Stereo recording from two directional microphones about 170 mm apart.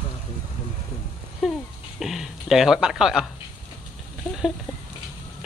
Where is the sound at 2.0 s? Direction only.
Centre (ahead or behind).